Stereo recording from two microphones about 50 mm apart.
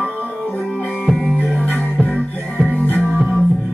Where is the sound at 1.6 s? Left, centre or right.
Left.